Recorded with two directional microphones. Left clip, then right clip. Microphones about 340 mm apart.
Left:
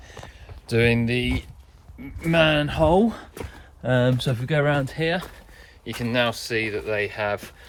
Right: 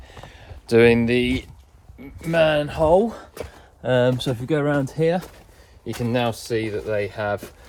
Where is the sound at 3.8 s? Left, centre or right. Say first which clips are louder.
Right 3 dB; right.